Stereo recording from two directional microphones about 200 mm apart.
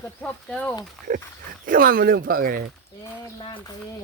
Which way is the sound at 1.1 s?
45° right (ahead or behind).